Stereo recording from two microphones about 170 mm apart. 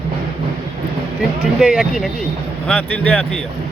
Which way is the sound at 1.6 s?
5° right (ahead or behind).